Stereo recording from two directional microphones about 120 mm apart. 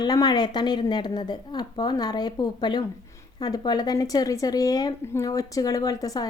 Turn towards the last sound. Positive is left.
turn(degrees=30)  # may be behind; listen again after turning